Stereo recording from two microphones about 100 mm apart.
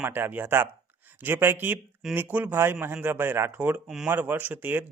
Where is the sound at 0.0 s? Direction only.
20° right (ahead or behind).